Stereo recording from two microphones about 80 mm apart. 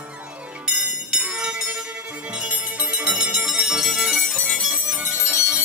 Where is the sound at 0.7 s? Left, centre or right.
Centre.